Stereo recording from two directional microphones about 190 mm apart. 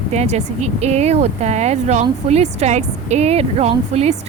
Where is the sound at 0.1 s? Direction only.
35° right (ahead or behind).